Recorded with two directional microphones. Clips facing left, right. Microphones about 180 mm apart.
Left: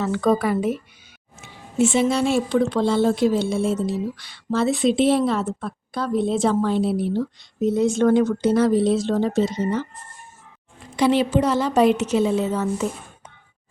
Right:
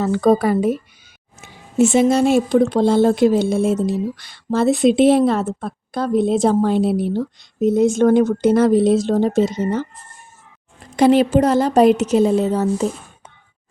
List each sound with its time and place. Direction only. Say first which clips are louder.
0.0 s a woman's voice: right 5 dB; 35° right (ahead or behind)
1.8 s speech: right 5 dB; 45° right (ahead or behind)
10.9 s a woman's voice: right 5 dB; 45° right (ahead or behind)